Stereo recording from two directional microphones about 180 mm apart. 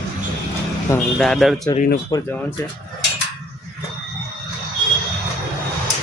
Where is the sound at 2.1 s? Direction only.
20° left (ahead or behind).